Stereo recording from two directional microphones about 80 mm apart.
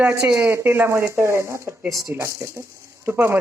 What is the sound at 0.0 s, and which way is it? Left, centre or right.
Speech, centre.